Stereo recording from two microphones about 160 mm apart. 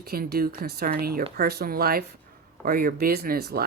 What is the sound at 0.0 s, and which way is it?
Speech, 75° right (ahead or behind).